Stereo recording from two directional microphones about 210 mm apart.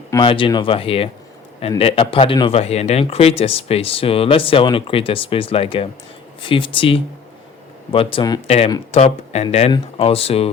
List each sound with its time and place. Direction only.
0.1 s speech: 20° left (ahead or behind)